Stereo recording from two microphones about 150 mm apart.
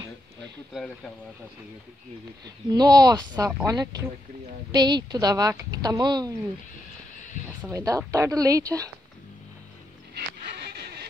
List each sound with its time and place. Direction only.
2.7 s a woman's voice: 25° right (ahead or behind)
7.7 s a woman's voice: 20° right (ahead or behind)
10.8 s a sound: 90° right